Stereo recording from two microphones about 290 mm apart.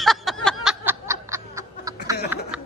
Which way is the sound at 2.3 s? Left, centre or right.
Centre.